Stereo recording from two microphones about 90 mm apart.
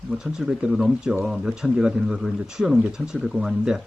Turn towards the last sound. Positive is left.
turn(degrees=-5)  # may be behind; listen again after turning